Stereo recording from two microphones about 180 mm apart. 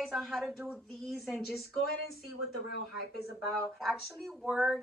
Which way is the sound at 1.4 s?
60° left (ahead or behind).